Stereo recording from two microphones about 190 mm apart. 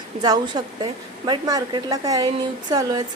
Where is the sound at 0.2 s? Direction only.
20° right (ahead or behind).